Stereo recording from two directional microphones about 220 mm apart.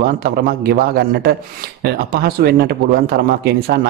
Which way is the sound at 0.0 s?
45° right (ahead or behind).